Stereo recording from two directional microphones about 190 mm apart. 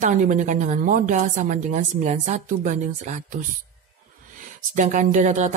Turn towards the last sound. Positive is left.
turn(degrees=-40)  # may be behind; listen again after turning